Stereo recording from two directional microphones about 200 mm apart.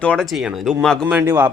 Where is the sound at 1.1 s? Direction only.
10° right (ahead or behind).